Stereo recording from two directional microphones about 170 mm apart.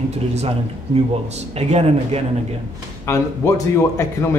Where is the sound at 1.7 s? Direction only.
40° right (ahead or behind).